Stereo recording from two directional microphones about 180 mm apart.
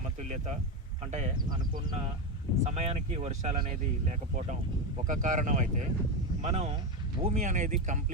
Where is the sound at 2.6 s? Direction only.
35° right (ahead or behind).